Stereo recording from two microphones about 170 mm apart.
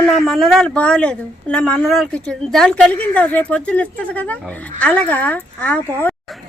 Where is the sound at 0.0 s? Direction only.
Centre (ahead or behind).